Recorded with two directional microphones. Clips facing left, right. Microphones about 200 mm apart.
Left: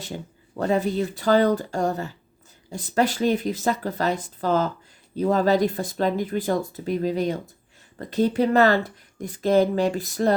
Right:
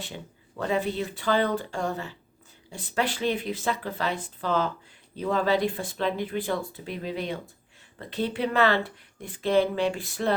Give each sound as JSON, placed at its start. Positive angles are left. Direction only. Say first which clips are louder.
{"t": 0.0, "sound": "speech", "louder": "left 5 dB", "side_deg": 40}